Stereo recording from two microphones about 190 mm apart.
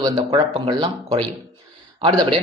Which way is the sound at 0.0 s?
20° right (ahead or behind).